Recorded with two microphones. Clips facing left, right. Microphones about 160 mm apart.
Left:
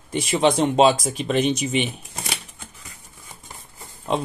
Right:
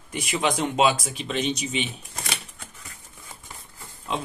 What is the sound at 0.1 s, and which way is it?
Speech, 30° left (ahead or behind).